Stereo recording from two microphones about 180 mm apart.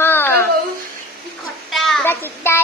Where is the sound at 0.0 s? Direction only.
10° left (ahead or behind).